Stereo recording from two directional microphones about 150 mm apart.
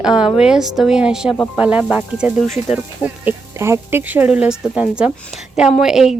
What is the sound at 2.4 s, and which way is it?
Speech, 50° left (ahead or behind).